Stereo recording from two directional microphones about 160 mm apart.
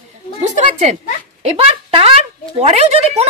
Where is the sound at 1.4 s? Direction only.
40° right (ahead or behind).